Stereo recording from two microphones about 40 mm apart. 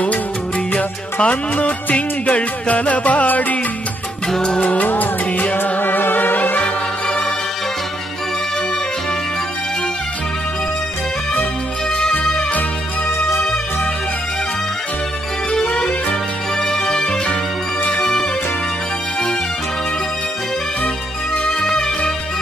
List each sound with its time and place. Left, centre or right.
1.2 s music: left
4.4 s music: left
4.8 s music: left
5.6 s music: left
6.6 s music: left
12.1 s music: left
15.7 s music: left
16.6 s music: centre
21.5 s music: centre